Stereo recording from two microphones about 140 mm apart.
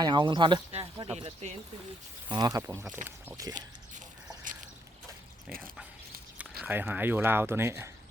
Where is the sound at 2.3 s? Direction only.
30° right (ahead or behind).